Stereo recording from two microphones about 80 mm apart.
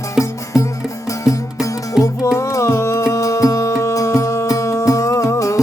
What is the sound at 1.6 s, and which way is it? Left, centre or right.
Music, left.